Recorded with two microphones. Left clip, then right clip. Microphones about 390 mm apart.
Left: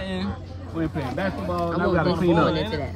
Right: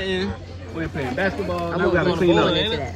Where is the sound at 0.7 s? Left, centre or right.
Centre.